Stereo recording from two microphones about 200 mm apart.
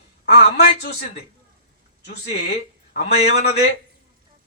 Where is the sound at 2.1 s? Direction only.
55° left (ahead or behind).